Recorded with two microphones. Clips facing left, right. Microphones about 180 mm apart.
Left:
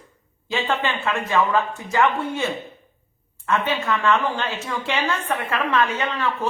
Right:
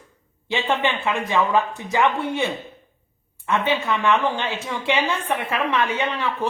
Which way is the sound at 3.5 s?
10° right (ahead or behind).